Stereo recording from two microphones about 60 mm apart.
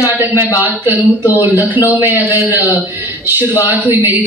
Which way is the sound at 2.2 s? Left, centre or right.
Right.